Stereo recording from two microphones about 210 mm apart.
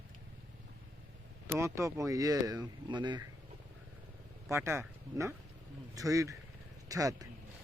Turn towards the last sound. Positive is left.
turn(degrees=-15)  # may be behind; listen again after turning